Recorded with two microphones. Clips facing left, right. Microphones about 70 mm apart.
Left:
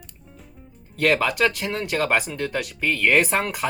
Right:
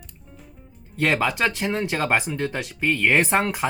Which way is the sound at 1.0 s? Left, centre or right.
Right.